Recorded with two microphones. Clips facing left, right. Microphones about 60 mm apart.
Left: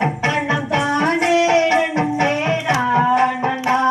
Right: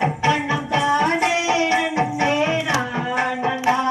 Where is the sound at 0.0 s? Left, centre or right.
Left.